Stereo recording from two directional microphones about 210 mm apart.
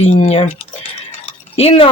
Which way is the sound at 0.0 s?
30° left (ahead or behind).